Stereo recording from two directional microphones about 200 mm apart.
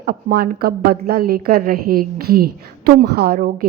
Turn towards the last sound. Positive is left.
turn(degrees=-50)  # may be behind; listen again after turning